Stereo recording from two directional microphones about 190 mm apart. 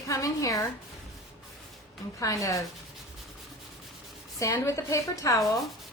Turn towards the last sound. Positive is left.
turn(degrees=15)  # may be behind; listen again after turning